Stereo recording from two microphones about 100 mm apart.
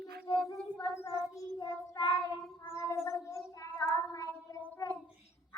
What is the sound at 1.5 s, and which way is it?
Child singing, 45° left (ahead or behind).